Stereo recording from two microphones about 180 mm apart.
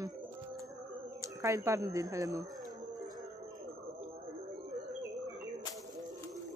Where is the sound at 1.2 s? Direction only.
15° right (ahead or behind).